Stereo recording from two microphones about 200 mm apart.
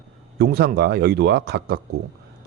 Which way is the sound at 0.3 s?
55° right (ahead or behind).